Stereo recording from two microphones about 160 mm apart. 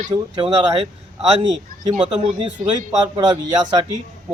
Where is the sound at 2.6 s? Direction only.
25° right (ahead or behind).